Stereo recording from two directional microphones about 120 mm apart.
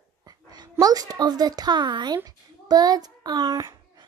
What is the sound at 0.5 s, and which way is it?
A woman's voice, 35° right (ahead or behind).